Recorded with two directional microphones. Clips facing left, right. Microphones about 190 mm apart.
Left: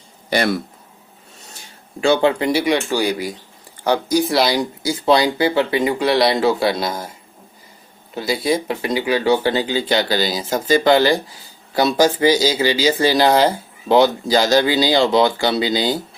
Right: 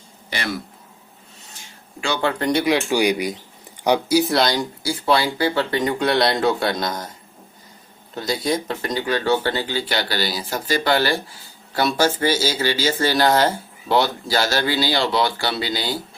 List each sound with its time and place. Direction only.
0.3 s speech: 40° left (ahead or behind)
2.2 s speech: 10° left (ahead or behind)
2.9 s speech: 15° right (ahead or behind)
4.2 s speech: centre (ahead or behind)
8.1 s speech: 5° left (ahead or behind)